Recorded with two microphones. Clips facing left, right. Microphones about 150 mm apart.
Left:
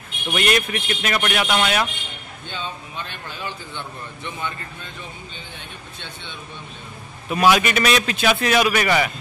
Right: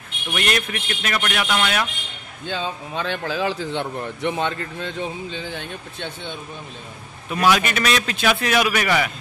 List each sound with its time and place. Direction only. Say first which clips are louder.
0.3 s speech: left 3 dB; 10° left (ahead or behind)
2.4 s a man's voice: right 5 dB; 90° right
7.2 s a man's voice: left 2 dB; 10° left (ahead or behind)